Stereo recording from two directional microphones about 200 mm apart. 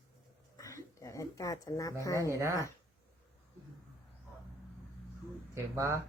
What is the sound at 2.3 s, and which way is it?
Speech, 15° right (ahead or behind).